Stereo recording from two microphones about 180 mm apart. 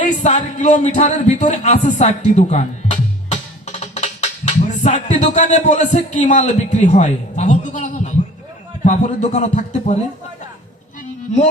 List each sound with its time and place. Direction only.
0.0 s speech: 40° left (ahead or behind)